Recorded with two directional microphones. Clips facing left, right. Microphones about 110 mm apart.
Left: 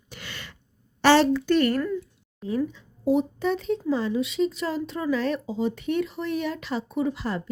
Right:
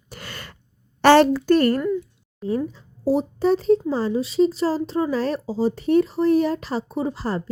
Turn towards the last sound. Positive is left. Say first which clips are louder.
# right 2 dB
turn(degrees=-35)  # may be behind; listen again after turning